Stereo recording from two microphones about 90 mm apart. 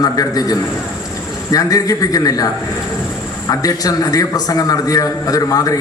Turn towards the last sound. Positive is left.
turn(degrees=40)  # may be behind; listen again after turning